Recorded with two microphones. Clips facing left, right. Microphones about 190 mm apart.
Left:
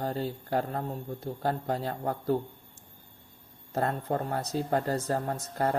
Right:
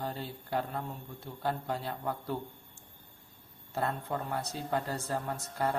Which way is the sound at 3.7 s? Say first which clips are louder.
Left 5 dB; 40° left (ahead or behind).